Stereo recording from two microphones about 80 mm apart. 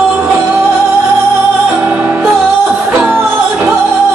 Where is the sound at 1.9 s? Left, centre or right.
Centre.